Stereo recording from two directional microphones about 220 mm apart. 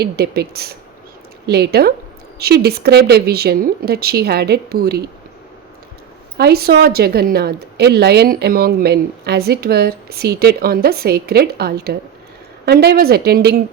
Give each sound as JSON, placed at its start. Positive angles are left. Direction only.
{"t": 0.0, "sound": "a woman's voice", "side_deg": -45}
{"t": 6.3, "sound": "a woman's voice", "side_deg": -45}